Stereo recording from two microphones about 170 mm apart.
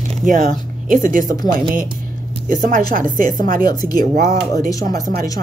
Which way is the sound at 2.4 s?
55° right (ahead or behind).